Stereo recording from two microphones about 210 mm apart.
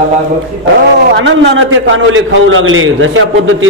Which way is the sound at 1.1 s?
55° right (ahead or behind).